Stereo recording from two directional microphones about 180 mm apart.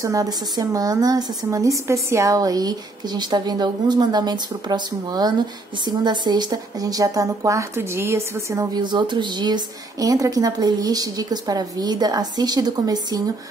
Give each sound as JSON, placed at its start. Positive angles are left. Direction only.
{"t": 0.0, "sound": "a woman's voice", "side_deg": -20}